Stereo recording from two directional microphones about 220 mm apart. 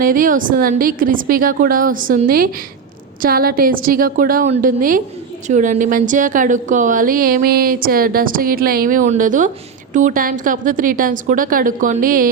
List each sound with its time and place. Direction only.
0.0 s a woman's voice: 40° right (ahead or behind)